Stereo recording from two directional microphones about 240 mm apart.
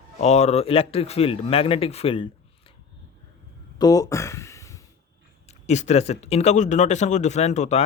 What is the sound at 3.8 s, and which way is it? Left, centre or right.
Speech, centre.